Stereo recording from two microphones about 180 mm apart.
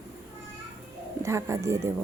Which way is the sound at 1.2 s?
15° right (ahead or behind).